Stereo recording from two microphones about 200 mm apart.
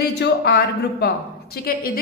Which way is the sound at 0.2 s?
50° left (ahead or behind).